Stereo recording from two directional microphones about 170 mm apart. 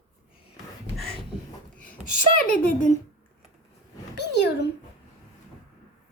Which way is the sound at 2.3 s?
55° left (ahead or behind).